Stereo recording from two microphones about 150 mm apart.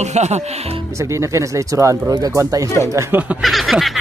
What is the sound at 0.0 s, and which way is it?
Speech, 50° right (ahead or behind).